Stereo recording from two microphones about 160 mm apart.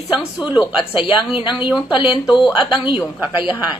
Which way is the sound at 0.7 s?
30° left (ahead or behind).